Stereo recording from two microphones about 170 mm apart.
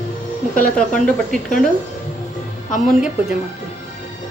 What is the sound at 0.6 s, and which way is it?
Speech, 5° left (ahead or behind).